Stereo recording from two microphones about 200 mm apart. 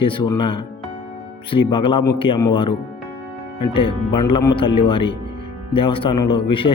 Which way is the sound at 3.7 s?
25° left (ahead or behind).